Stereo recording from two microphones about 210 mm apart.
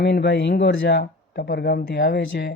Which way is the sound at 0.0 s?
55° left (ahead or behind).